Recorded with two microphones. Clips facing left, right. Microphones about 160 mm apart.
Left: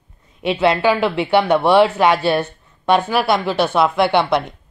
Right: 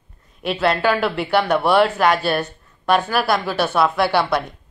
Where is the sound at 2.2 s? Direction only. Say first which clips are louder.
Left 3 dB; 25° left (ahead or behind).